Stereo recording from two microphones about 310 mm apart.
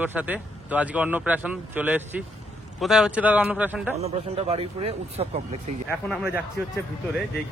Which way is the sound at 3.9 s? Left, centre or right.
Centre.